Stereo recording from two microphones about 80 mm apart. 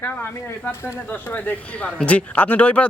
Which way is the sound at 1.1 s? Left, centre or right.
Left.